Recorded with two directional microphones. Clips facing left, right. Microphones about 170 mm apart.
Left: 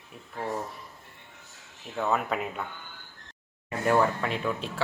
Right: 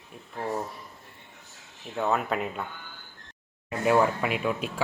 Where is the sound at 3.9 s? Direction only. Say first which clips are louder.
Right 2 dB; 10° right (ahead or behind).